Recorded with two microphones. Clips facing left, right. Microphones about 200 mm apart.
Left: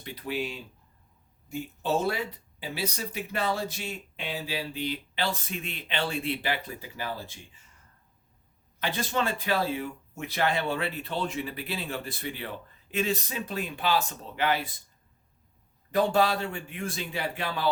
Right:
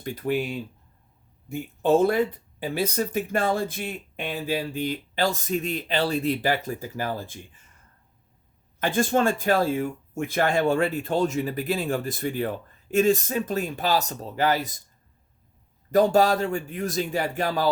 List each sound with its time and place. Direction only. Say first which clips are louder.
0.0 s speech: right 7 dB; 45° right (ahead or behind)
1.5 s speech: right 8 dB; 55° right (ahead or behind)
8.8 s speech: right 7 dB; 50° right (ahead or behind)
15.9 s speech: right 5 dB; 40° right (ahead or behind)